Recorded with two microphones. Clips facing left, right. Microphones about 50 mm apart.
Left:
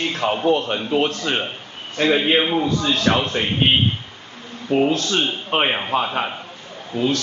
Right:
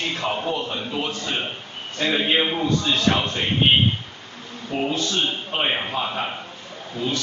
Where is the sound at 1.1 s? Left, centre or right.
Left.